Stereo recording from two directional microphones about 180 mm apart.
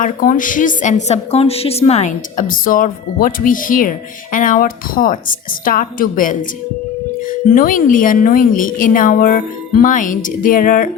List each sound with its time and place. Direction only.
0.0 s a woman's voice: 45° left (ahead or behind)
7.5 s a woman's voice: 50° left (ahead or behind)